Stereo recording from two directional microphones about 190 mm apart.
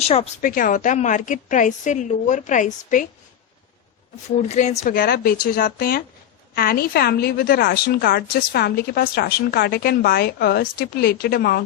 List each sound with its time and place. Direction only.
0.0 s a woman's voice: 30° left (ahead or behind)
0.4 s a woman's voice: 45° left (ahead or behind)
4.4 s a woman's voice: 35° left (ahead or behind)
4.8 s a woman's voice: 50° left (ahead or behind)